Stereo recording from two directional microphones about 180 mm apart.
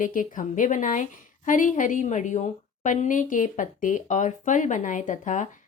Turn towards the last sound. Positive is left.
turn(degrees=45)  # may be behind; listen again after turning